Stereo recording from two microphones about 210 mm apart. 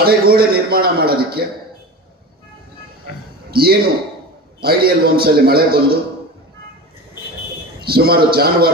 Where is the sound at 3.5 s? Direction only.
45° right (ahead or behind).